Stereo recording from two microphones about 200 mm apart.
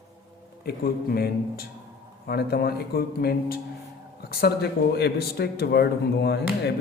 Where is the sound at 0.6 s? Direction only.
50° left (ahead or behind).